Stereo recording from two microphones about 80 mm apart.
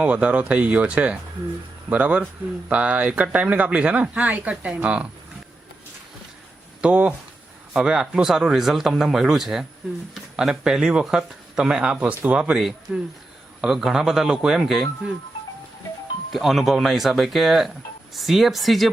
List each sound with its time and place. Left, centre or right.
0.0 s speech: centre
6.8 s speech: centre
12.5 s speech: centre
16.3 s speech: centre